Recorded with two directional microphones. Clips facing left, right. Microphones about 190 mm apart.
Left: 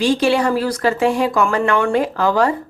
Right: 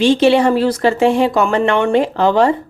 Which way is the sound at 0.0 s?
25° right (ahead or behind).